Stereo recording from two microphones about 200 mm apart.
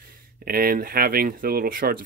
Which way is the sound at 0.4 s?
45° right (ahead or behind).